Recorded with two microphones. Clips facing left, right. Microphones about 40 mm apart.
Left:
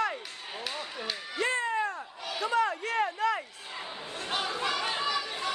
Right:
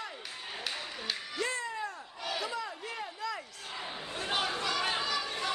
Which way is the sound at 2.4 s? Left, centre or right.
Left.